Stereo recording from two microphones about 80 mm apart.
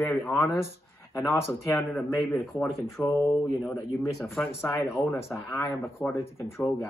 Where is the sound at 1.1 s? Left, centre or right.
Left.